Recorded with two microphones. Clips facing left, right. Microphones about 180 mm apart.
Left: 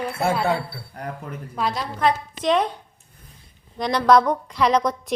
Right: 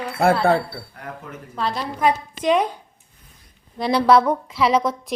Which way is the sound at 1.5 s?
10° left (ahead or behind).